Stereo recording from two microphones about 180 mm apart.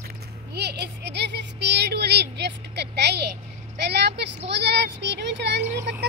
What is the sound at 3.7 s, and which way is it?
A woman's voice, 70° right (ahead or behind).